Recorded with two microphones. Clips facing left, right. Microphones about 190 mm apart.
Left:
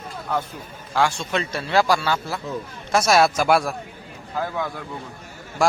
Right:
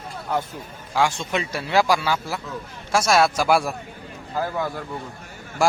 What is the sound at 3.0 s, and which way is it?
A man's voice, 5° left (ahead or behind).